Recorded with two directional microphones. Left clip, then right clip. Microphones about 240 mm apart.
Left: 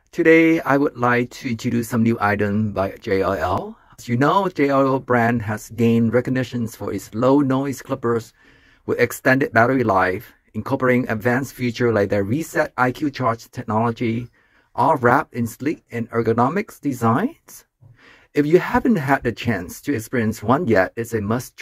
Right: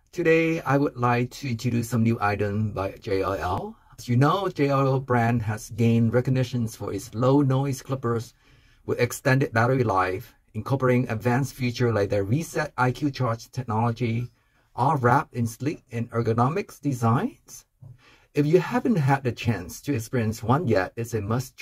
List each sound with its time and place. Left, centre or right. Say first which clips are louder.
0.1 s speech: left 7 dB; left
18.3 s speech: left 5 dB; left